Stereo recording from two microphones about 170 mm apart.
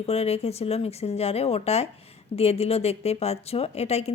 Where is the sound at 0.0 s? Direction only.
35° left (ahead or behind).